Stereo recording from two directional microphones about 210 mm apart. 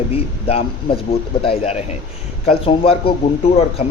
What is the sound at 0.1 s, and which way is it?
A man's voice, 25° left (ahead or behind).